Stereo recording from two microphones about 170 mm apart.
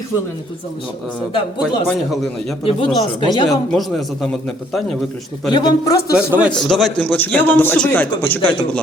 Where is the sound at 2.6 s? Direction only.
30° left (ahead or behind).